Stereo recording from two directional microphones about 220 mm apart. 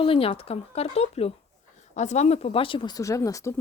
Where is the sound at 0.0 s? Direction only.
25° left (ahead or behind).